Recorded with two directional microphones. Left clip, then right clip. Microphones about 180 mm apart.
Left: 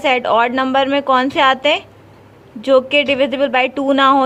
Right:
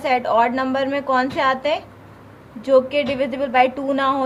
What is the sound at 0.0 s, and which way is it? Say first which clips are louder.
A woman's voice: left 3 dB; 30° left (ahead or behind).